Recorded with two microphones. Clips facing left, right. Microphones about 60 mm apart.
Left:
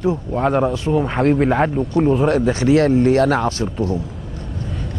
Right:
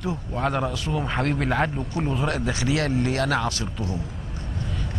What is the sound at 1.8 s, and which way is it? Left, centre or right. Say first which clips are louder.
Speech: left 11 dB; centre.